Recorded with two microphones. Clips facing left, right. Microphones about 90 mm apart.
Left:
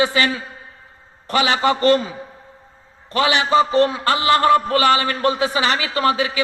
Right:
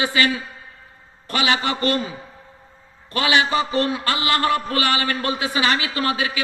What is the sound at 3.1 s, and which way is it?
A man's voice, 30° left (ahead or behind).